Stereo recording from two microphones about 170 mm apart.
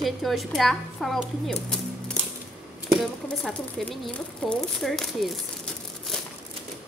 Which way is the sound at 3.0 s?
Centre (ahead or behind).